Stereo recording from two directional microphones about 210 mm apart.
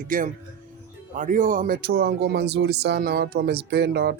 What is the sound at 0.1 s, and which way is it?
Speech, 40° right (ahead or behind).